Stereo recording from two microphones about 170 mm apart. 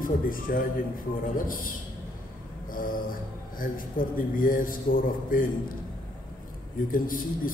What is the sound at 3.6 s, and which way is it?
A man's voice, 55° left (ahead or behind).